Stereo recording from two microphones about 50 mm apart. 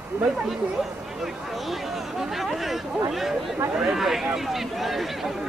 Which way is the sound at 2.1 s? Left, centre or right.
Centre.